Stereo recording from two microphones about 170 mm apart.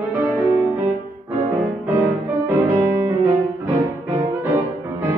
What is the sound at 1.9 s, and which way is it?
Music, 20° right (ahead or behind).